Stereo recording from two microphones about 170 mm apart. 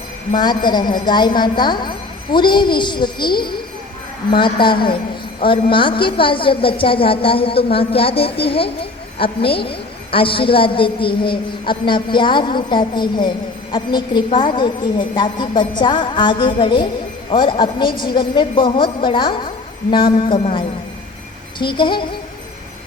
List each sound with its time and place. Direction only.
0.3 s a woman's voice: 25° left (ahead or behind)